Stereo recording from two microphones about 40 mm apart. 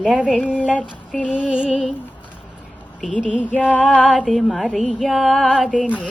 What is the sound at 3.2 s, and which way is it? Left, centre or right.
Female singing, left.